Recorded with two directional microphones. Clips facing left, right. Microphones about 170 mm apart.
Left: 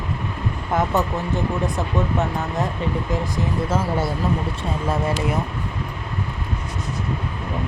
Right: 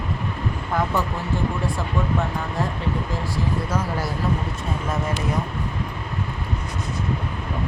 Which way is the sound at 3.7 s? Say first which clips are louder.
Left 3 dB; 25° left (ahead or behind).